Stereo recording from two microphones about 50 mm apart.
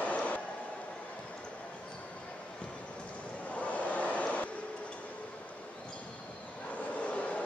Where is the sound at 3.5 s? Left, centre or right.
Left.